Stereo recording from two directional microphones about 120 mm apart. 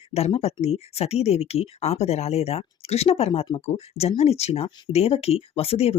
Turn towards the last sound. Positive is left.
turn(degrees=55)  # may be behind; listen again after turning